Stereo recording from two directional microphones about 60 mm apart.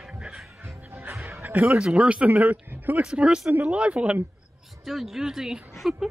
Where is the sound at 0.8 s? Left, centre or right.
Right.